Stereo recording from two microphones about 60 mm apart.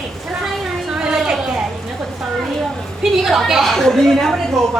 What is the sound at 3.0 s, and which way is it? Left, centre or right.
A woman's voice, centre.